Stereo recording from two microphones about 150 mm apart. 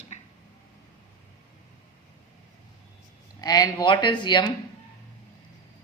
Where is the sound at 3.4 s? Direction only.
25° left (ahead or behind).